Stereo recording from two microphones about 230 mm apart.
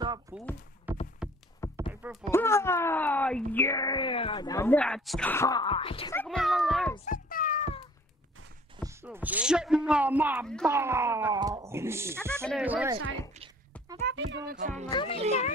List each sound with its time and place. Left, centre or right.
0.3 s a sound: centre
0.9 s rowboat: centre
1.9 s a sound: centre
2.3 s speech: centre
6.1 s speech: centre
7.1 s cat: left
8.8 s speech: centre
14.0 s music: right
14.6 s speech: right
14.9 s a child's voice: left